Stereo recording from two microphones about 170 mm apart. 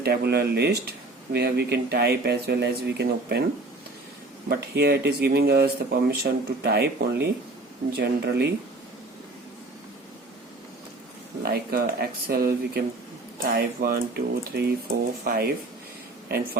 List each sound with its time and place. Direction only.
0.0 s speech: 70° right (ahead or behind)
4.4 s speech: 70° right (ahead or behind)
11.4 s speech: 65° right (ahead or behind)